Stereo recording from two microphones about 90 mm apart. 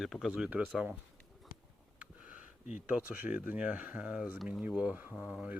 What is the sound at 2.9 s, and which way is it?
Speech, 15° right (ahead or behind).